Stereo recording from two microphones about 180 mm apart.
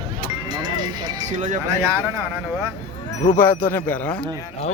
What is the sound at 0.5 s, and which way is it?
Music, 25° right (ahead or behind).